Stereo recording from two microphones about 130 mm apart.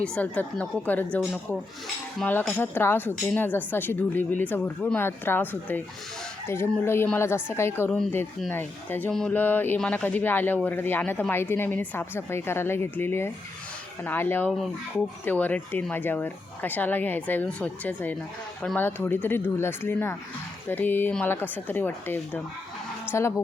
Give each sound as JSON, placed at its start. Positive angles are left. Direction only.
{"t": 0.0, "sound": "speech", "side_deg": 10}
{"t": 2.5, "sound": "speech", "side_deg": 15}